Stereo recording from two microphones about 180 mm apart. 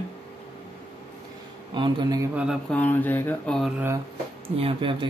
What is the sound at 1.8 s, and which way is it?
Speech, 25° right (ahead or behind).